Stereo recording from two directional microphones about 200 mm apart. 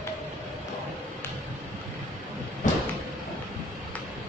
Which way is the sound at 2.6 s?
40° left (ahead or behind).